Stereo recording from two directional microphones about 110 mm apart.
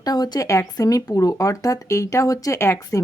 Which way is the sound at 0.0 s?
35° left (ahead or behind).